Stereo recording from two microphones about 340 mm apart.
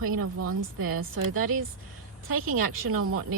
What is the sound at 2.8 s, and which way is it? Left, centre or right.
Speech, right.